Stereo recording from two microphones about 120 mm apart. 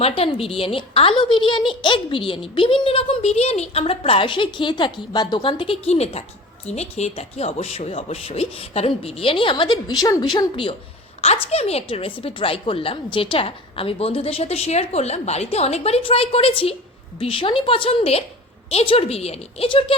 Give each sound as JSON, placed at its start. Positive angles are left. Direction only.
{"t": 0.0, "sound": "a woman's voice", "side_deg": 55}
{"t": 11.2, "sound": "a woman's voice", "side_deg": 60}